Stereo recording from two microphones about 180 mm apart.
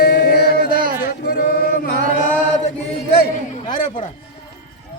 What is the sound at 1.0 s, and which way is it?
Chant, 60° left (ahead or behind).